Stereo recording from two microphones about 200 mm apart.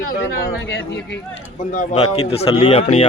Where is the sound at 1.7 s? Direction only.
35° left (ahead or behind).